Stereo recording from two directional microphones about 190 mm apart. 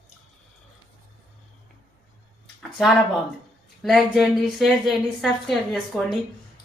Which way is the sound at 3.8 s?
Centre (ahead or behind).